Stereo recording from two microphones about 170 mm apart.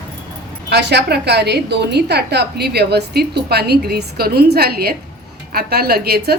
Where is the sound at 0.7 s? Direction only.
80° right.